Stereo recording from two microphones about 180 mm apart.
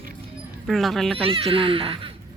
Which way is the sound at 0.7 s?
Centre (ahead or behind).